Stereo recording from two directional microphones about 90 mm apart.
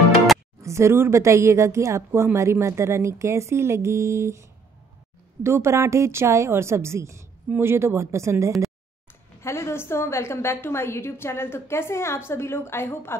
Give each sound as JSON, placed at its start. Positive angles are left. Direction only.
{"t": 0.6, "sound": "a woman's voice", "side_deg": -30}
{"t": 9.4, "sound": "a woman's voice", "side_deg": 30}